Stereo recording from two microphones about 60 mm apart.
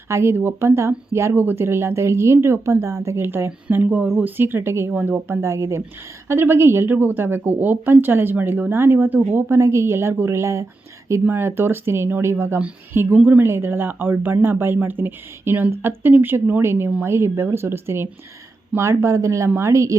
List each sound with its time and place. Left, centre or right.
0.1 s speech: right
2.8 s speech: right
3.2 s speech: right
4.9 s speech: right
5.4 s speech: right
6.2 s speech: right
6.8 s speech: right
9.6 s speech: right
11.3 s a woman's voice: right
18.8 s speech: right